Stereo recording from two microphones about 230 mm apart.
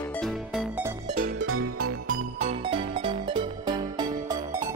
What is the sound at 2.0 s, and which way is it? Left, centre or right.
Music, right.